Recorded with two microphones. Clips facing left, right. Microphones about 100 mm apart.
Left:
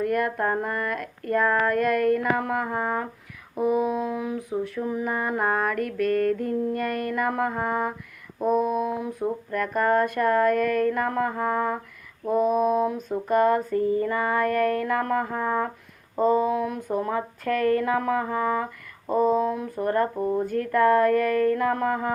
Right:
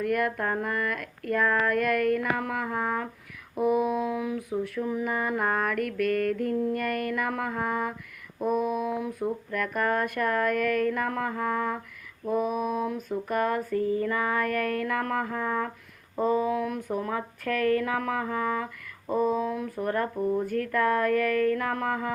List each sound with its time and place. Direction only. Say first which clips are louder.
0.0 s speech: left 3 dB; 30° left (ahead or behind)
12.3 s mantra: left 6 dB; 30° left (ahead or behind)
13.1 s speech: left 7 dB; 30° left (ahead or behind)